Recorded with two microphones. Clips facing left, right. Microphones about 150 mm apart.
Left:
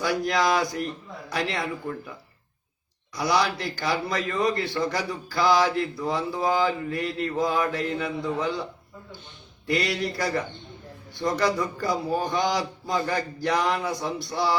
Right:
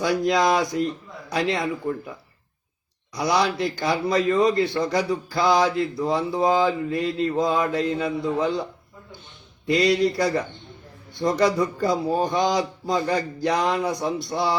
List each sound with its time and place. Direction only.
0.0 s speech: 20° right (ahead or behind)
3.2 s speech: 25° right (ahead or behind)
9.6 s speech: 20° right (ahead or behind)